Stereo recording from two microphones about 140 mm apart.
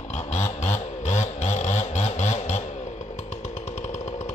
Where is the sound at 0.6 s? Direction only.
55° left (ahead or behind).